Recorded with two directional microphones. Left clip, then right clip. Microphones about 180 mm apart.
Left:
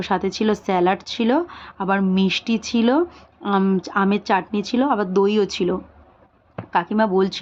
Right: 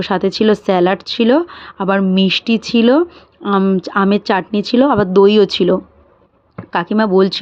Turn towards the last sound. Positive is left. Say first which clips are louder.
# right 6 dB
turn(degrees=-30)  # may be behind; listen again after turning